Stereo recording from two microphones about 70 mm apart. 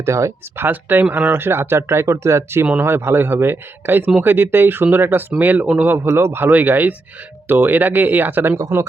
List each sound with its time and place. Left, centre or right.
0.0 s speech: right
6.0 s speech: right